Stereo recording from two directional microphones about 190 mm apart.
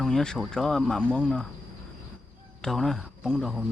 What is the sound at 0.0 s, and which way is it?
Speech, 5° left (ahead or behind).